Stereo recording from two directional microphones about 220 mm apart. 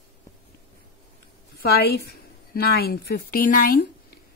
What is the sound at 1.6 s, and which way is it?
A woman's voice, 45° left (ahead or behind).